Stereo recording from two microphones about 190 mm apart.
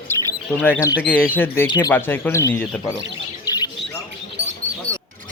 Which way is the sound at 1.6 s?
25° left (ahead or behind).